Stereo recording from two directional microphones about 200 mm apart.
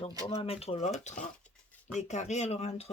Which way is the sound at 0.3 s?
30° left (ahead or behind).